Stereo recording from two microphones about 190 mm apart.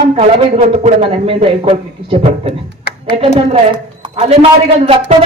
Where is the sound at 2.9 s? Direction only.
55° left (ahead or behind).